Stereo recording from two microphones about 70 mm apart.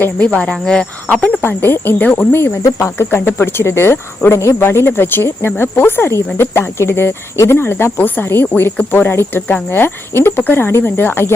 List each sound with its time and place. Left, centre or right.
0.2 s cricket: centre
0.6 s speech: centre
1.0 s speech: centre
1.4 s speech: left
2.7 s speech: left